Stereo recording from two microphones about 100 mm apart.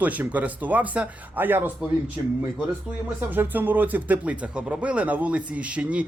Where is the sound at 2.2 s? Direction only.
35° right (ahead or behind).